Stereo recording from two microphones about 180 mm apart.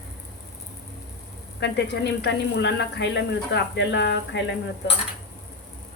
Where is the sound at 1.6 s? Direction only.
70° left (ahead or behind).